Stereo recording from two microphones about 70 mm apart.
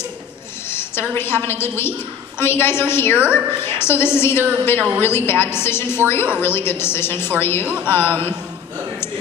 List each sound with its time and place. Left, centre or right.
0.7 s a sound: left
1.1 s a woman's voice: left
3.2 s a woman's voice: centre
3.6 s a woman's voice: left
4.7 s a woman's voice: right
5.0 s a woman's voice: left
7.6 s speech: centre
8.1 s a man's voice: right